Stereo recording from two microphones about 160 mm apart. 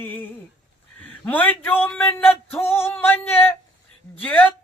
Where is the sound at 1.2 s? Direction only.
10° left (ahead or behind).